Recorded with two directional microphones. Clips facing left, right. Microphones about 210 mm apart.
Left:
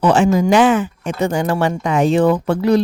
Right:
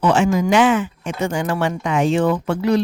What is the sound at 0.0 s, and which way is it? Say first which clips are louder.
Speech: left 3 dB; 35° left (ahead or behind).